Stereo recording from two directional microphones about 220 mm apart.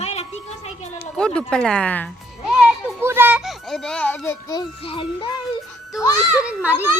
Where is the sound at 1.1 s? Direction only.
5° left (ahead or behind).